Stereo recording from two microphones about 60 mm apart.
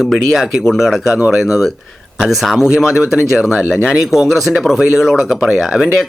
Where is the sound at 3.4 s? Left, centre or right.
Centre.